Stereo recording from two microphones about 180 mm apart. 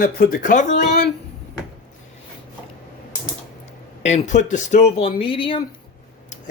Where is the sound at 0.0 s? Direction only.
55° left (ahead or behind).